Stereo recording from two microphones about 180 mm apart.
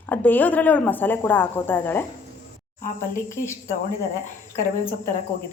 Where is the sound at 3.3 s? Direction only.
15° left (ahead or behind).